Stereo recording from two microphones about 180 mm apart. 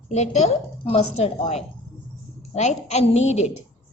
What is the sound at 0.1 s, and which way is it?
A woman's voice, 40° left (ahead or behind).